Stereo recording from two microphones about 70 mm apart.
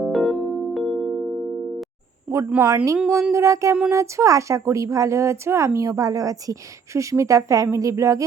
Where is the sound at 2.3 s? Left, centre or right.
Centre.